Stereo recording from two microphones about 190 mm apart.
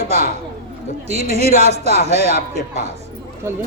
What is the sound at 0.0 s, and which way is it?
Speech, 35° right (ahead or behind).